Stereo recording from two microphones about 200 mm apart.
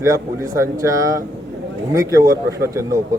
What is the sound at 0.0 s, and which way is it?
Speech, 15° right (ahead or behind).